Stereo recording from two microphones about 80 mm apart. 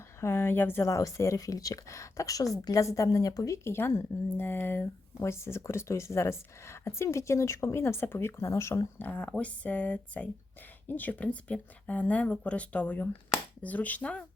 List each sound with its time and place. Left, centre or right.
0.2 s speech: left
0.9 s a woman's voice: left
9.0 s speech: left